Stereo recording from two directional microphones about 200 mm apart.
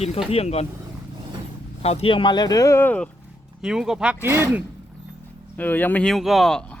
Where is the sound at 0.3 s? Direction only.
30° left (ahead or behind).